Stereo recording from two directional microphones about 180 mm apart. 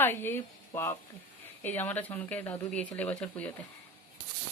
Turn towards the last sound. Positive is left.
turn(degrees=5)  # may be behind; listen again after turning